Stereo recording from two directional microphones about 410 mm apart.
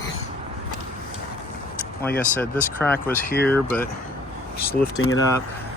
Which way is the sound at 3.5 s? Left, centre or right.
Centre.